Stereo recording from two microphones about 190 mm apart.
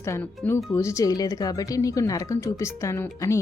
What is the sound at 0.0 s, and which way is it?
Speech, 15° left (ahead or behind).